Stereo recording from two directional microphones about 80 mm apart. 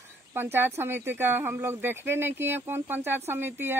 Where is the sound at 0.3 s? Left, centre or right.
Right.